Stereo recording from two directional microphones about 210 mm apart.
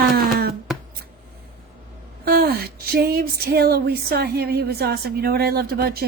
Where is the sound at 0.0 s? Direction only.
45° right (ahead or behind).